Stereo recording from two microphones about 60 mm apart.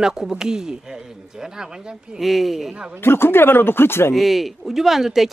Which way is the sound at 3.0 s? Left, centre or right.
Left.